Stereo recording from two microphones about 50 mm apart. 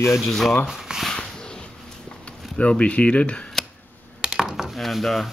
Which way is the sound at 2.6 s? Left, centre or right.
Left.